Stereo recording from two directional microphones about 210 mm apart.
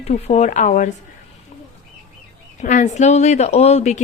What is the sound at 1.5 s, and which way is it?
Bird, 35° left (ahead or behind).